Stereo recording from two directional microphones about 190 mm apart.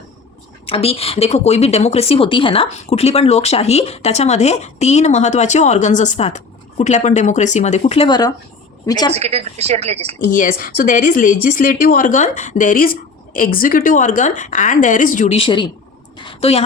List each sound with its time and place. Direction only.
0.6 s speech: 30° left (ahead or behind)
9.1 s speech: 35° right (ahead or behind)
10.2 s a woman's voice: 45° left (ahead or behind)